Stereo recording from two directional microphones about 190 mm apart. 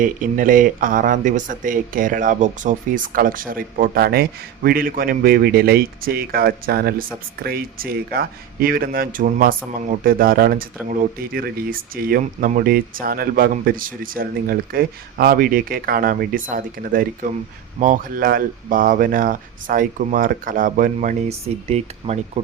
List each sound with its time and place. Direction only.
0.0 s speech: 45° right (ahead or behind)